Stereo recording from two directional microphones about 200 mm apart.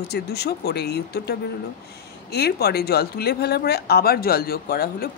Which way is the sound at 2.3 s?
55° left (ahead or behind).